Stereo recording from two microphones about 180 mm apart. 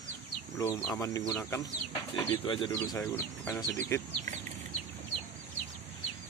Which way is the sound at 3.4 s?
5° left (ahead or behind).